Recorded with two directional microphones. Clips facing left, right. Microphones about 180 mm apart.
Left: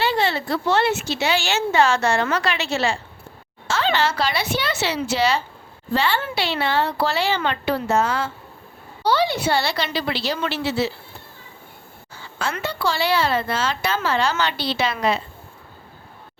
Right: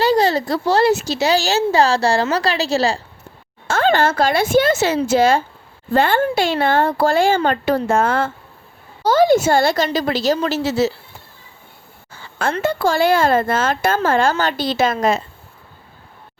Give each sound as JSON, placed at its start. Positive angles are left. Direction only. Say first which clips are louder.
{"t": 0.0, "sound": "speech", "louder": "right 6 dB", "side_deg": -40}
{"t": 3.7, "sound": "speech", "louder": "right 5 dB", "side_deg": -50}
{"t": 12.6, "sound": "speech", "louder": "right 7 dB", "side_deg": -50}